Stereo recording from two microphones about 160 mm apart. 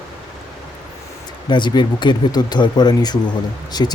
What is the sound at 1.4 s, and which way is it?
Speech, 30° left (ahead or behind).